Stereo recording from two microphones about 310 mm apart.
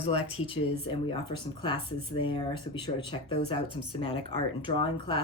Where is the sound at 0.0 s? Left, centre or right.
Centre.